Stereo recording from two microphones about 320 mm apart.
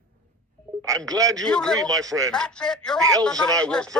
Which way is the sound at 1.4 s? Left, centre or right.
Centre.